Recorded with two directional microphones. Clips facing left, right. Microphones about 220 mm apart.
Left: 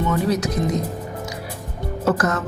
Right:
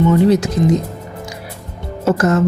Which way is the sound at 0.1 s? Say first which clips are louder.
Right 8 dB; 25° right (ahead or behind).